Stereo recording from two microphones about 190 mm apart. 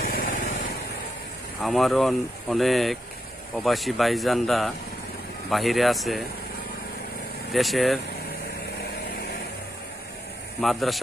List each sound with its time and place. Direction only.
0.0 s vehicle: 50° left (ahead or behind)
1.6 s speech: centre (ahead or behind)
7.5 s speech: centre (ahead or behind)
10.6 s speech: centre (ahead or behind)